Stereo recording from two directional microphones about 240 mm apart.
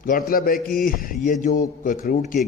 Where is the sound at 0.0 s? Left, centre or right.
Left.